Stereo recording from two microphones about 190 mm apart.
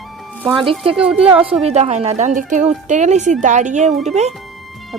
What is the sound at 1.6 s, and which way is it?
Speech, 35° right (ahead or behind).